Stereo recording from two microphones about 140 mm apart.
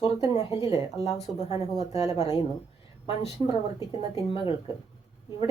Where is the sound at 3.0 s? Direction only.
40° left (ahead or behind).